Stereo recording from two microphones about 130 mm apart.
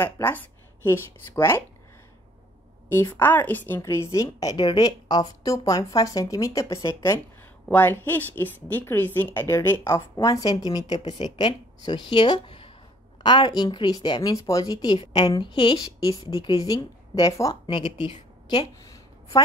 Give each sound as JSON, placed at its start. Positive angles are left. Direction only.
{"t": 0.0, "sound": "a woman's voice", "side_deg": 15}
{"t": 2.9, "sound": "a woman's voice", "side_deg": 15}
{"t": 17.6, "sound": "a woman's voice", "side_deg": 40}